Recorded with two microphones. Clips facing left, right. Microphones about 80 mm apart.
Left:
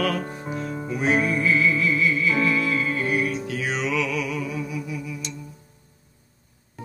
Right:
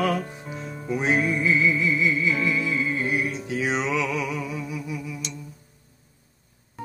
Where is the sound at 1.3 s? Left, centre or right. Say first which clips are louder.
Left 1 dB; centre.